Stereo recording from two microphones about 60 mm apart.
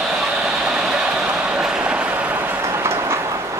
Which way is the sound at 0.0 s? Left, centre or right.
Centre.